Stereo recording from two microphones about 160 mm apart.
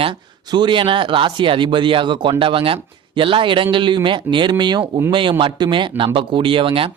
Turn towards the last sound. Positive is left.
turn(degrees=-35)  # may be behind; listen again after turning